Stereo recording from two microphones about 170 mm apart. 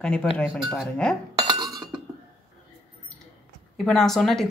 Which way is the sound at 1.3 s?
25° right (ahead or behind).